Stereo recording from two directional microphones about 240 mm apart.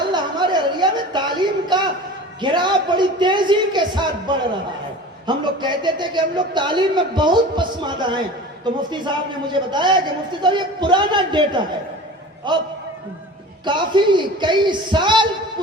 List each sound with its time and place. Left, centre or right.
0.0 s a sound: centre
2.4 s a man's voice: centre
13.7 s a man's voice: centre